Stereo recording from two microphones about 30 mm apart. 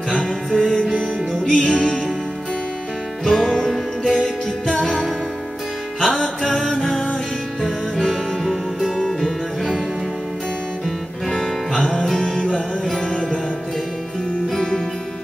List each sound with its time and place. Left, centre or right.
0.1 s music: centre
3.3 s music: centre
6.0 s music: centre
9.2 s music: centre
11.2 s music: centre
14.5 s music: centre